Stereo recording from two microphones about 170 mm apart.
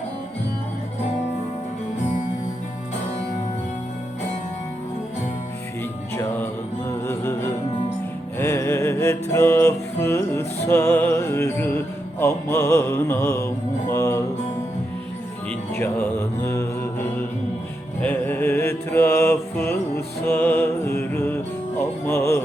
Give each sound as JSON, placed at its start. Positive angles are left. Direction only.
{"t": 6.1, "sound": "music", "side_deg": 10}
{"t": 8.4, "sound": "music", "side_deg": 15}
{"t": 12.2, "sound": "mantra", "side_deg": 15}
{"t": 13.9, "sound": "music", "side_deg": 15}
{"t": 15.7, "sound": "music", "side_deg": 15}
{"t": 18.0, "sound": "mantra", "side_deg": 10}
{"t": 21.8, "sound": "music", "side_deg": 15}